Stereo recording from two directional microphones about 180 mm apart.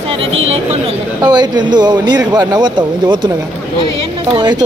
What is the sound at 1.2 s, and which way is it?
A man's voice, 25° right (ahead or behind).